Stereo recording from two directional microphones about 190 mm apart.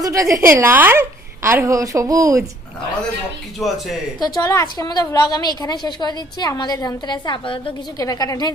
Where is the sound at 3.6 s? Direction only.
Centre (ahead or behind).